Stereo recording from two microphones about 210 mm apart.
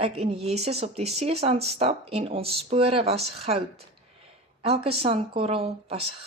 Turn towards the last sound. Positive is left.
turn(degrees=-30)  # may be behind; listen again after turning